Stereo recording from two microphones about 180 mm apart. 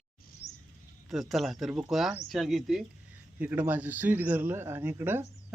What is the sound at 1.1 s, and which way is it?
A man's voice, centre (ahead or behind).